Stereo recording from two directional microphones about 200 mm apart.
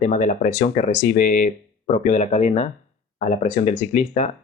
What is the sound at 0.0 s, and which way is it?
Speech, 40° left (ahead or behind).